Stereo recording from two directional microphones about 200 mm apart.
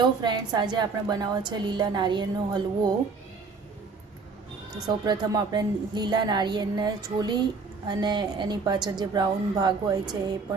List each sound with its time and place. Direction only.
0.0 s a woman's voice: 20° right (ahead or behind)
5.0 s a woman's voice: 20° right (ahead or behind)